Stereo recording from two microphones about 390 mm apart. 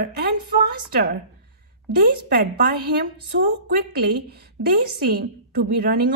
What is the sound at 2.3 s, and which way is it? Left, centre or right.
Speech, right.